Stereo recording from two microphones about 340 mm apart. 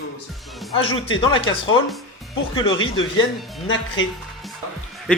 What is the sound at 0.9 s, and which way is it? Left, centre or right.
Speech, left.